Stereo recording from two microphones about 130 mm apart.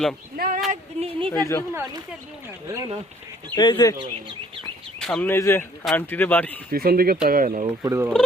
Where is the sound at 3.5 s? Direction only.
35° left (ahead or behind).